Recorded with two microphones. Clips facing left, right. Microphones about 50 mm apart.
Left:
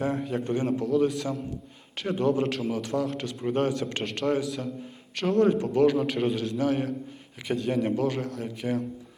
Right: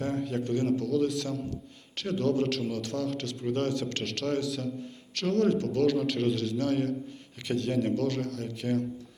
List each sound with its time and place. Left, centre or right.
0.0 s a man's voice: centre